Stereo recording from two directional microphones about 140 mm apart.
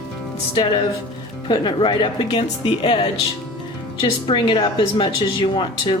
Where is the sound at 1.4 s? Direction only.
35° left (ahead or behind).